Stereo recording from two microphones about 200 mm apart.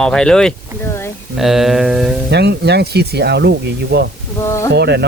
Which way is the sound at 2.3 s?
55° right (ahead or behind).